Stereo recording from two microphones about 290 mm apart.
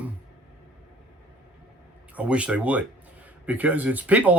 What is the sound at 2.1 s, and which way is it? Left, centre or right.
Speech, centre.